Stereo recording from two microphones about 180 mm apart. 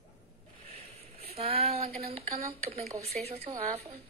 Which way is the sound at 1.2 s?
35° right (ahead or behind).